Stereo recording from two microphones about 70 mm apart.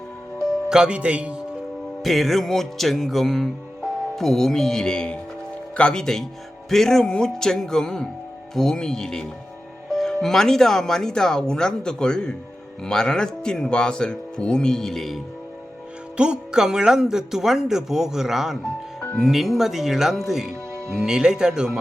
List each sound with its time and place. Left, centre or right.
0.7 s speech: centre
2.0 s music: centre
5.7 s speech: centre
16.1 s speech: centre
19.2 s music: centre
21.0 s speech: centre